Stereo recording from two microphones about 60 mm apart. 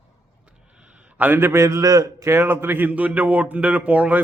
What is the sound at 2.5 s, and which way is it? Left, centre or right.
A man's voice, right.